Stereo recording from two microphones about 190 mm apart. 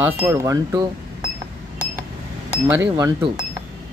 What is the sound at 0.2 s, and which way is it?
Speech, 15° right (ahead or behind).